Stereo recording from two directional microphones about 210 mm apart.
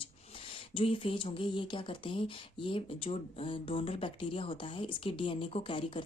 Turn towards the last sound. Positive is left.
turn(degrees=25)  # may be behind; listen again after turning